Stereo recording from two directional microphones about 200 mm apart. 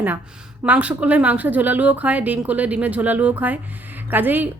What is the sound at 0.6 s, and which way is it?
A woman's voice, 5° right (ahead or behind).